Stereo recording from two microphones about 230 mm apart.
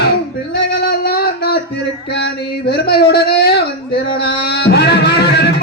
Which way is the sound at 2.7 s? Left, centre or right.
Left.